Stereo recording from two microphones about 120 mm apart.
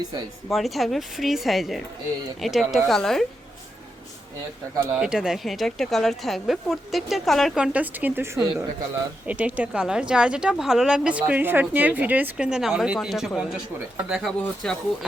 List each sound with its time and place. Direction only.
0.0 s a woman's voice: 35° right (ahead or behind)
0.5 s speech: centre (ahead or behind)
4.9 s speech: 5° right (ahead or behind); by 8.6 s 20° right (ahead or behind)
9.2 s speech: 10° right (ahead or behind)